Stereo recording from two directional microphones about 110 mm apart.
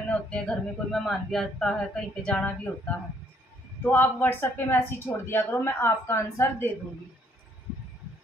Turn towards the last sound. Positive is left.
turn(degrees=20)  # may be behind; listen again after turning